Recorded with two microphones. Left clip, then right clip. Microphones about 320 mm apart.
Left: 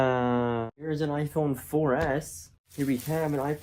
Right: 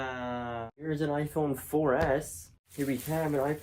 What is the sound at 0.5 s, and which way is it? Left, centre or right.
Speech, centre.